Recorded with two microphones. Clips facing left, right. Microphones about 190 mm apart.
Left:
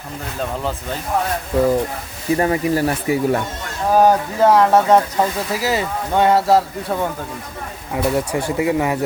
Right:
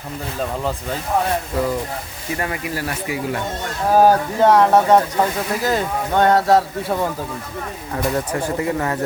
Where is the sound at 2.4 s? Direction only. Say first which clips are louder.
Left 8 dB; 30° left (ahead or behind).